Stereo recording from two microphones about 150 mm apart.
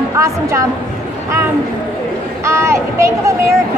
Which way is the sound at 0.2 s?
20° right (ahead or behind).